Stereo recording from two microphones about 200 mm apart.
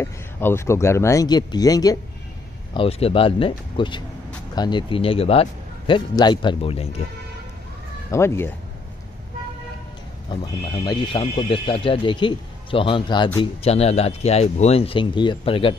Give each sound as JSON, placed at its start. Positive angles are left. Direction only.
{"t": 0.0, "sound": "speech", "side_deg": 10}
{"t": 8.1, "sound": "speech", "side_deg": 15}
{"t": 10.3, "sound": "speech", "side_deg": 20}